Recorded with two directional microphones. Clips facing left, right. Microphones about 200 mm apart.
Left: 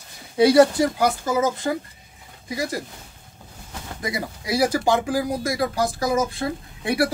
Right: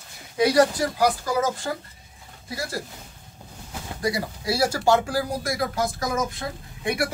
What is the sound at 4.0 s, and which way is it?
Speech, 20° left (ahead or behind).